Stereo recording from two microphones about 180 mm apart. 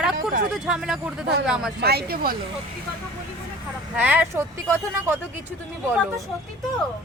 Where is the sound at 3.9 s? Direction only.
10° right (ahead or behind).